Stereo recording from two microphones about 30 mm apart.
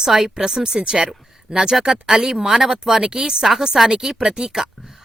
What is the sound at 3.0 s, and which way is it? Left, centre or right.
Speech, right.